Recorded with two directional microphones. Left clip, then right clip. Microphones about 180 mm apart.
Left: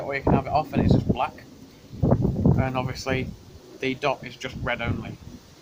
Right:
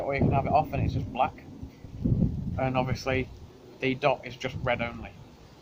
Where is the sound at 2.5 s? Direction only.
15° right (ahead or behind).